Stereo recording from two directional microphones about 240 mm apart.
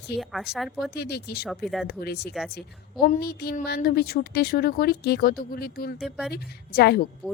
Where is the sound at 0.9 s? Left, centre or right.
Left.